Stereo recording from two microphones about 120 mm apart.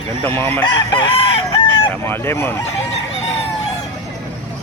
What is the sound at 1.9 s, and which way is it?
Speech, 20° left (ahead or behind).